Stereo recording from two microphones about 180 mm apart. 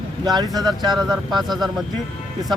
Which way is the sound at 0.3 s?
20° right (ahead or behind).